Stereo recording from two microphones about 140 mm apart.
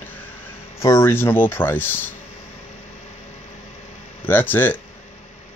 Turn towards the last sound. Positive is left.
turn(degrees=15)  # may be behind; listen again after turning